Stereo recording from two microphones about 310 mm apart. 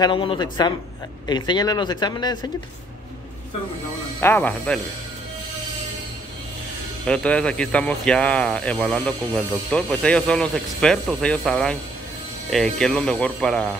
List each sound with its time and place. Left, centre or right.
0.0 s speech: centre
4.2 s speech: centre
7.1 s speech: centre